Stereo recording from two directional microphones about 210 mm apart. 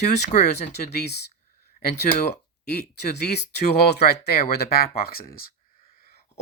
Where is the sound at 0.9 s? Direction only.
50° left (ahead or behind).